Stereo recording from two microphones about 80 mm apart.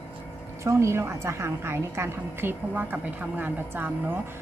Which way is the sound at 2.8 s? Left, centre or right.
Right.